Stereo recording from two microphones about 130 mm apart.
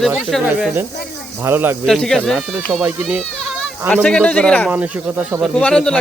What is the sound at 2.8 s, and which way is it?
Speech, 15° right (ahead or behind).